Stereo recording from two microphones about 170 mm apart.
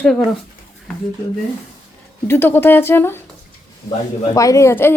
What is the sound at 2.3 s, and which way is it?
Speech, 15° left (ahead or behind).